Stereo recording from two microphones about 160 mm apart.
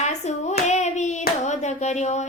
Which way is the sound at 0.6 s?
45° left (ahead or behind).